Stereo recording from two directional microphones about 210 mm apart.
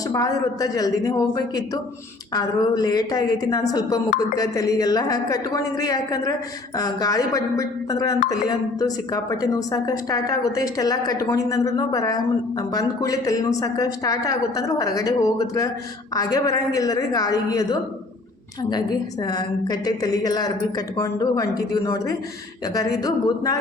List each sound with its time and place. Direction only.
0.1 s speech: 15° left (ahead or behind)
2.3 s speech: 20° left (ahead or behind)
19.2 s speech: 20° left (ahead or behind)